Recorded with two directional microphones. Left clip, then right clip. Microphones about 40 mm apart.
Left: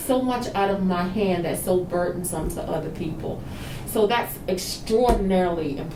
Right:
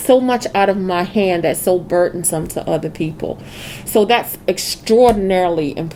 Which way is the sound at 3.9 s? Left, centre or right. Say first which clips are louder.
Right 8 dB; right.